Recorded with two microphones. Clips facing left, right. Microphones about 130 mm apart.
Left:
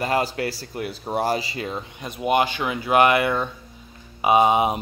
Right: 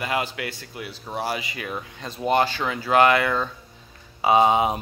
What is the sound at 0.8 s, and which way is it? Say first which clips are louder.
A man's voice: left 5 dB; 50° left (ahead or behind).